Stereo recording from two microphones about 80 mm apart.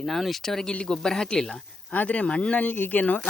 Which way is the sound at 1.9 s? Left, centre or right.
Centre.